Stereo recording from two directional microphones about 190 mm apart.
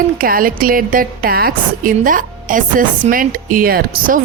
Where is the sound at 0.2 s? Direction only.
50° right (ahead or behind).